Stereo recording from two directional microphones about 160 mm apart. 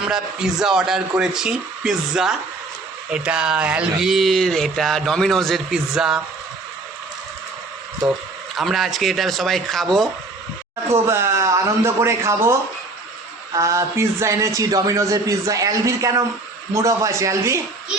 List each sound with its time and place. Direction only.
0.1 s speech: 5° right (ahead or behind)
8.5 s speech: centre (ahead or behind)
10.9 s a man's voice: 15° right (ahead or behind)